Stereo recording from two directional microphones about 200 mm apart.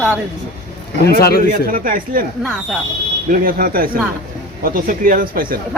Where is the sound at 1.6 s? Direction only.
45° right (ahead or behind).